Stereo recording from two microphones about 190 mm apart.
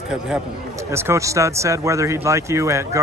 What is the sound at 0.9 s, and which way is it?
Speech, 15° right (ahead or behind).